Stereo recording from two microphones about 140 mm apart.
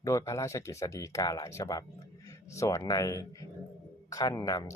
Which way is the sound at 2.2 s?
20° left (ahead or behind).